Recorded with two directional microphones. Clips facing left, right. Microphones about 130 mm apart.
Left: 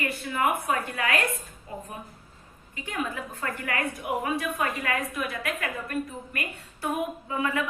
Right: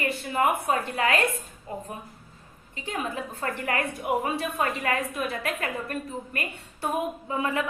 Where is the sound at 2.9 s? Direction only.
25° right (ahead or behind).